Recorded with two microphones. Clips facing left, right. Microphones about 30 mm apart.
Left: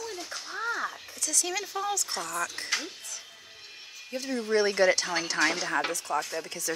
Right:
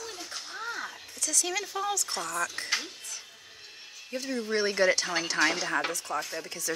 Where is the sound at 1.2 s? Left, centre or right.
Centre.